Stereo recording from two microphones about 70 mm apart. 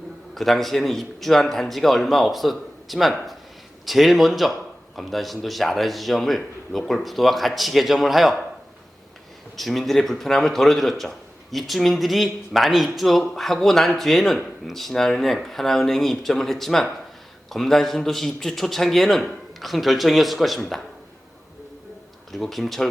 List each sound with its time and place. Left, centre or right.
0.3 s speech: centre
9.6 s speech: centre
22.3 s speech: centre